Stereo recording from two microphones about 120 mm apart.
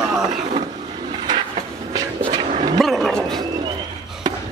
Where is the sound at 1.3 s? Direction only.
35° right (ahead or behind).